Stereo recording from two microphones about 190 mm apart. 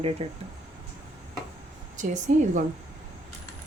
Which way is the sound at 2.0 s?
40° right (ahead or behind).